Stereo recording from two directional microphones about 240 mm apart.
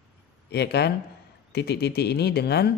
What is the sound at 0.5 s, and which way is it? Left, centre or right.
Speech, left.